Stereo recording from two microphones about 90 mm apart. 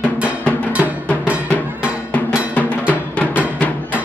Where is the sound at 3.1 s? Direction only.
15° left (ahead or behind).